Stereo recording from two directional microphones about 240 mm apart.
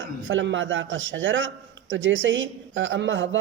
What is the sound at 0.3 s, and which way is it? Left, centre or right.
A woman's voice, right.